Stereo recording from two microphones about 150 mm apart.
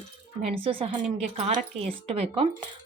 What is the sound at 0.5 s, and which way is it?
A woman's voice, 35° right (ahead or behind).